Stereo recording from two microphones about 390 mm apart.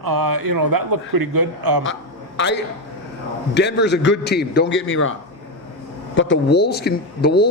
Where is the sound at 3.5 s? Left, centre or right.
Left.